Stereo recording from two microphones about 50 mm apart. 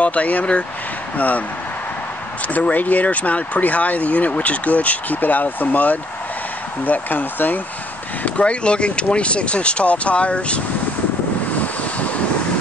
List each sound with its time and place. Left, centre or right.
0.0 s speech: left
2.4 s speech: left
8.2 s speech: left
11.5 s waves: left